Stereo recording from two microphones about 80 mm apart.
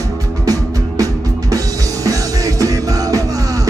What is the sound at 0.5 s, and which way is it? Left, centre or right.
Music, right.